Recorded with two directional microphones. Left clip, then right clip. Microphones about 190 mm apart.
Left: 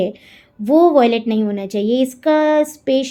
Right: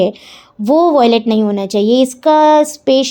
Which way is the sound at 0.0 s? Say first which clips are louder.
Right 6 dB; 40° right (ahead or behind).